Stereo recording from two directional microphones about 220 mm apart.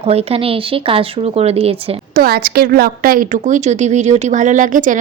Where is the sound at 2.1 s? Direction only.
45° right (ahead or behind).